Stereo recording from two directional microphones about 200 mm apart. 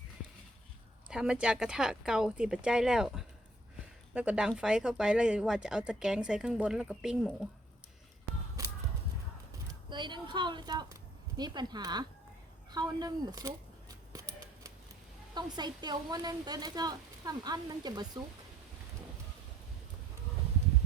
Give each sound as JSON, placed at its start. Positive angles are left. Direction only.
{"t": 1.1, "sound": "speech", "side_deg": -5}
{"t": 9.9, "sound": "speech", "side_deg": -25}
{"t": 12.7, "sound": "a sound", "side_deg": -20}
{"t": 15.4, "sound": "speech", "side_deg": -20}